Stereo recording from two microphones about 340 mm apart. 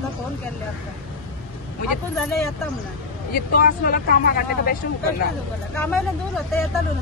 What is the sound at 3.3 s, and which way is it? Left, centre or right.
Speech, left.